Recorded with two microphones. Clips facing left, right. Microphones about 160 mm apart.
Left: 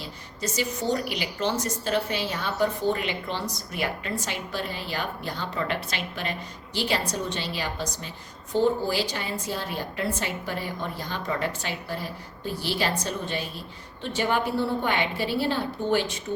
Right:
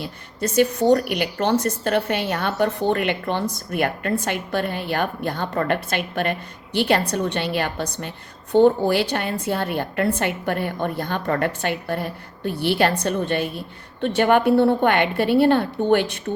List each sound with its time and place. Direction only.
0.0 s a woman's voice: 55° right (ahead or behind)